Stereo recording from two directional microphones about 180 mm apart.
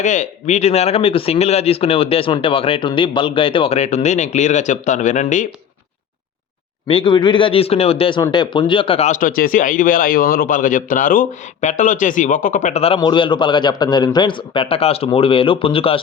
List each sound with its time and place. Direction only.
0.0 s speech: 45° left (ahead or behind)
6.8 s speech: 30° left (ahead or behind)